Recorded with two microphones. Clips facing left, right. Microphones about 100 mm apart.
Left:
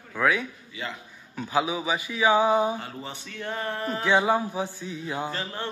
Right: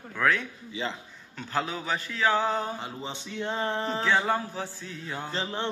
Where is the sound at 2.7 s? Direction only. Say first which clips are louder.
Even; 20° right (ahead or behind).